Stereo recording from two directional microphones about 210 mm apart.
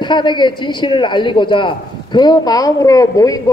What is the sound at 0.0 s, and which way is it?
A man's voice, 20° left (ahead or behind).